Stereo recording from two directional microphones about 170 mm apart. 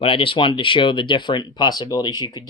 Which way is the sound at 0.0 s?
30° left (ahead or behind).